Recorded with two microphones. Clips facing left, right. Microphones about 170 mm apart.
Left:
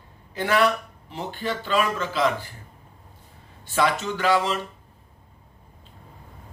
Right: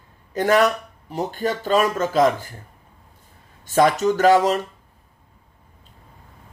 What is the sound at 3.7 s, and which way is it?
Speech, 45° right (ahead or behind).